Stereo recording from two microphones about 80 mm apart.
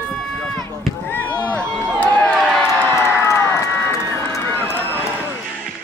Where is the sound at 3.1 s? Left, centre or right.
Left.